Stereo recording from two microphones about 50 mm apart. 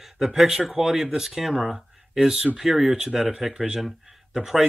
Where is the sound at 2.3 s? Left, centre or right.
Right.